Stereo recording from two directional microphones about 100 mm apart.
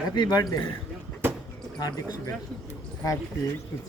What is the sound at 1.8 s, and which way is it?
Speech, 40° left (ahead or behind).